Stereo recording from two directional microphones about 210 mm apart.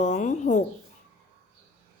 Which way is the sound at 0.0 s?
35° left (ahead or behind).